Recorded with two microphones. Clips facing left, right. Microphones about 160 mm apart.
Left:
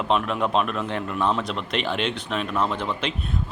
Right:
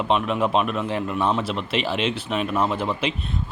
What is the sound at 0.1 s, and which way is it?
Speech, 5° right (ahead or behind).